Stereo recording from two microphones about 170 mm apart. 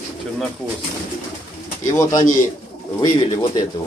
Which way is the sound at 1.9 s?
20° left (ahead or behind).